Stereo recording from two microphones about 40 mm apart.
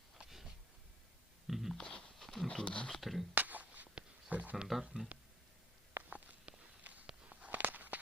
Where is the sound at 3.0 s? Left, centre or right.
Centre.